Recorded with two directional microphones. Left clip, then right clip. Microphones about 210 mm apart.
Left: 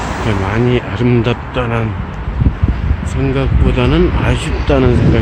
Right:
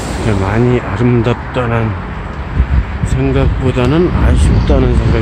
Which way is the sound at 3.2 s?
5° right (ahead or behind).